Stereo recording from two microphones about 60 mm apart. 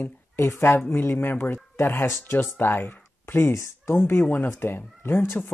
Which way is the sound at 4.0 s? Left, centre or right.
Left.